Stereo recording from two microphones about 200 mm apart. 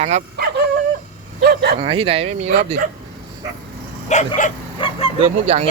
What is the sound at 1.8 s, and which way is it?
Speech, 30° right (ahead or behind).